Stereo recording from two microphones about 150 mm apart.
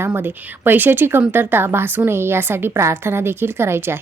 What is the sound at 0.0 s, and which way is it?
A woman's voice, 15° right (ahead or behind).